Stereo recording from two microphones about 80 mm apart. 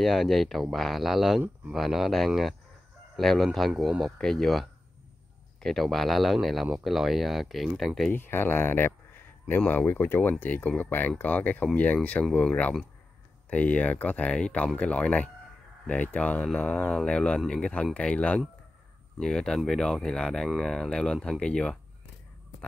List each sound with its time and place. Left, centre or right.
0.0 s speech: centre
8.1 s speech: left; by 21.7 s centre